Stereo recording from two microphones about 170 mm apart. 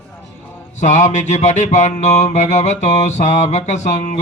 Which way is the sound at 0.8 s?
45° left (ahead or behind).